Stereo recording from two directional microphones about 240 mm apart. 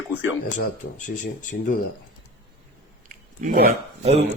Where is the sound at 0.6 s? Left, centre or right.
Left.